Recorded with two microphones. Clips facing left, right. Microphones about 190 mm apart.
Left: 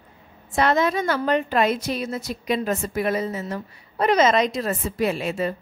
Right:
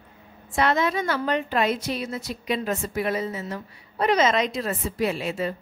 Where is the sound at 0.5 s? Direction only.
40° left (ahead or behind).